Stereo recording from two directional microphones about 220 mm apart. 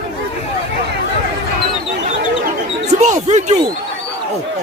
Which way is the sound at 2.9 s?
30° right (ahead or behind).